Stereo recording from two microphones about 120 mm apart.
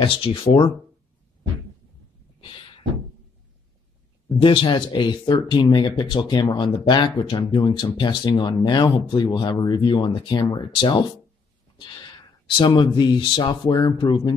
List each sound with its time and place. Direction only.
0.0 s speech: 45° left (ahead or behind)
2.4 s a sound: 45° left (ahead or behind)
4.4 s speech: 45° left (ahead or behind)
13.7 s speech: 30° left (ahead or behind)